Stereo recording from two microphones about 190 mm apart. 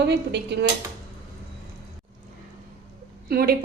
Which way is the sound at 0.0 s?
65° right (ahead or behind).